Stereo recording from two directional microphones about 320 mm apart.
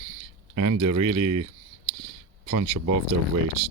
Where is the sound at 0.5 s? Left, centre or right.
Right.